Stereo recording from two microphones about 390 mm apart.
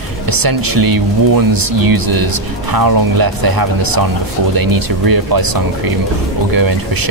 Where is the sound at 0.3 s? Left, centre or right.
Right.